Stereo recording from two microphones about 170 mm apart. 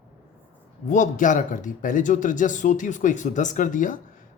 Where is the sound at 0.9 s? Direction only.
50° left (ahead or behind).